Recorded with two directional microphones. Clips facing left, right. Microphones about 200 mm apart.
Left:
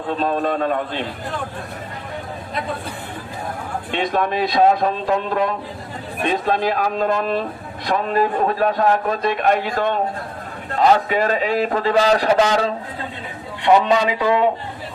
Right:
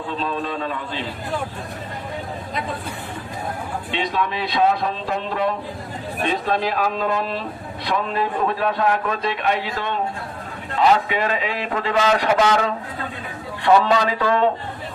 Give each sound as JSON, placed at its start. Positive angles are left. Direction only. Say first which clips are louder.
{"t": 0.1, "sound": "a man's voice", "louder": "left 7 dB", "side_deg": 50}
{"t": 3.9, "sound": "a man's voice", "louder": "left 4 dB", "side_deg": 50}
{"t": 13.7, "sound": "a man's voice", "louder": "left 1 dB", "side_deg": 15}